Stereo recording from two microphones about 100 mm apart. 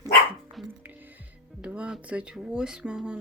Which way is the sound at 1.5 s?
10° right (ahead or behind).